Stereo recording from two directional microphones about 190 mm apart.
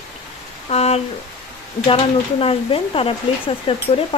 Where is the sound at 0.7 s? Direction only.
35° left (ahead or behind).